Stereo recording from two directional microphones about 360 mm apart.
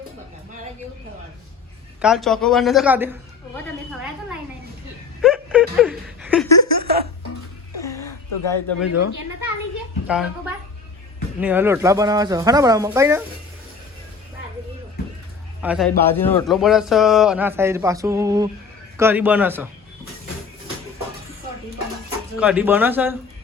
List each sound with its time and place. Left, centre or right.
2.0 s a man's voice: centre
5.2 s a sound: centre
6.8 s music: right
7.8 s a sound: centre
8.8 s speech: left
10.1 s a man's voice: centre
15.6 s a man's voice: centre
22.4 s a man's voice: centre